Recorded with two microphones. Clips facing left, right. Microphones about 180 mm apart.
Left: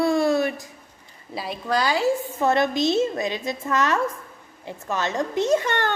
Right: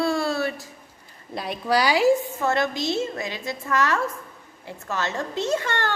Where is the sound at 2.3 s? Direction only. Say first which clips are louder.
Left 3 dB; 20° left (ahead or behind).